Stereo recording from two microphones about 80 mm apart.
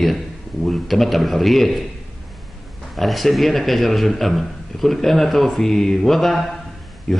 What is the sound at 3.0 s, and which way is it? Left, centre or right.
A man's voice, centre.